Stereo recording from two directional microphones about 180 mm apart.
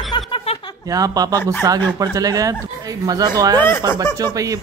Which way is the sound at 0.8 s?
20° right (ahead or behind).